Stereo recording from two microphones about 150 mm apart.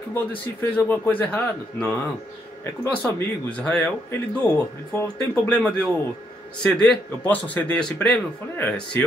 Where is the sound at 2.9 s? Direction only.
10° left (ahead or behind).